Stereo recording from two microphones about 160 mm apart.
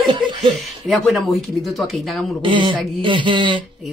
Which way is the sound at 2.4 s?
30° right (ahead or behind).